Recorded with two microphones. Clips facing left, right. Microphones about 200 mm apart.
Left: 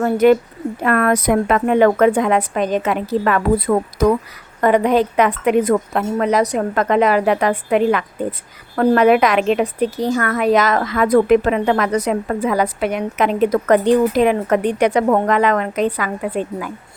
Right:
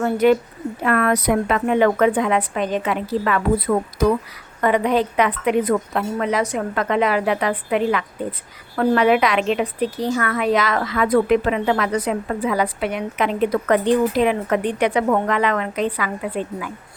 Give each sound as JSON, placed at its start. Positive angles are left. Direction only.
{"t": 0.0, "sound": "a woman's voice", "side_deg": 45}
{"t": 4.6, "sound": "a woman's voice", "side_deg": 45}